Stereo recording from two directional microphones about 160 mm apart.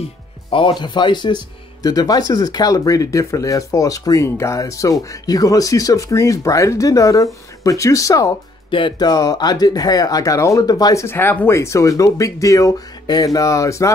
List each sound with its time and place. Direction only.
0.5 s speech: 35° left (ahead or behind)
8.6 s speech: 30° left (ahead or behind)